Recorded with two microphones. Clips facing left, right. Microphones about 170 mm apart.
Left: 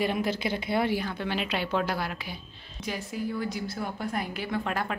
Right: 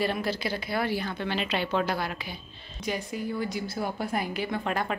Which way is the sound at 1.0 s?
5° left (ahead or behind).